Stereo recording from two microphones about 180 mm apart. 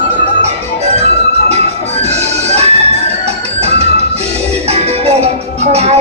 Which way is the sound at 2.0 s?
35° right (ahead or behind).